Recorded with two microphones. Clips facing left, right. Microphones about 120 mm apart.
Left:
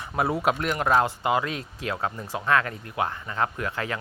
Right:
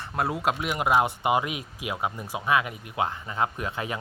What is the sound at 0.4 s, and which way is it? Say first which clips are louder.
Speech: left 2 dB; 10° right (ahead or behind).